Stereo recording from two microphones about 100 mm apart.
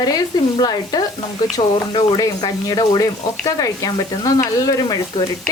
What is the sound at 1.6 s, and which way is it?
Speech, 60° left (ahead or behind).